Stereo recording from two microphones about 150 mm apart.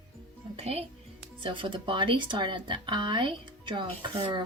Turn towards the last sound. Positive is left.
turn(degrees=-30)  # may be behind; listen again after turning